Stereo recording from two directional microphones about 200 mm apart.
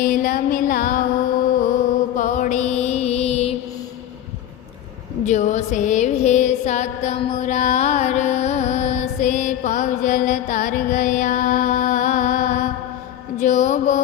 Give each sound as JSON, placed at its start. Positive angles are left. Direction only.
{"t": 0.0, "sound": "a sound", "side_deg": 45}
{"t": 2.1, "sound": "music", "side_deg": 40}
{"t": 5.2, "sound": "music", "side_deg": 35}
{"t": 13.4, "sound": "mantra", "side_deg": 40}